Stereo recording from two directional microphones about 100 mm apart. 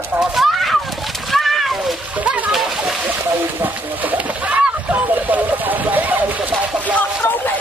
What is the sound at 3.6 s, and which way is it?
Speech, 15° right (ahead or behind).